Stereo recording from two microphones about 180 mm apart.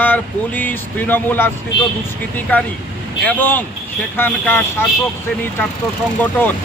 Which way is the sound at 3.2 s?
10° left (ahead or behind).